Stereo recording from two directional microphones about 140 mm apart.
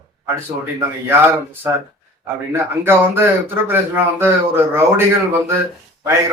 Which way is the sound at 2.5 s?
15° right (ahead or behind).